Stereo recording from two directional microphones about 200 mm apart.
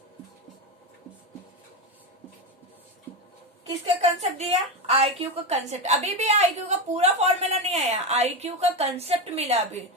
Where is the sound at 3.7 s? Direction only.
30° right (ahead or behind).